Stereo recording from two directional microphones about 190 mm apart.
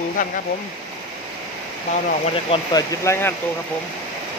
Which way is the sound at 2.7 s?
15° left (ahead or behind).